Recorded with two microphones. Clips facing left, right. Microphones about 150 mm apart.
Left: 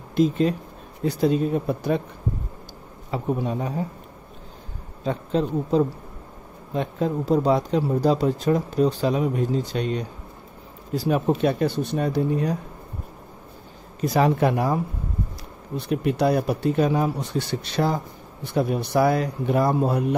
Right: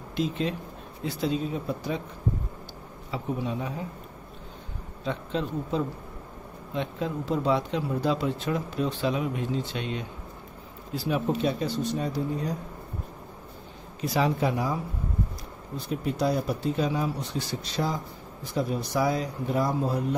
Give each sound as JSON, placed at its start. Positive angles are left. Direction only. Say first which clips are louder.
{"t": 0.1, "sound": "a man's voice", "louder": "left 8 dB", "side_deg": 45}
{"t": 3.1, "sound": "a man's voice", "louder": "left 5 dB", "side_deg": 50}
{"t": 5.0, "sound": "speech", "louder": "left 6 dB", "side_deg": 40}
{"t": 14.0, "sound": "speech", "louder": "left 5 dB", "side_deg": 55}